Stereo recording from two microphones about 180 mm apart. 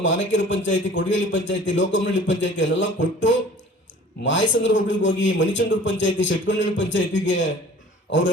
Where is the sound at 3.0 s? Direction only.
90° left.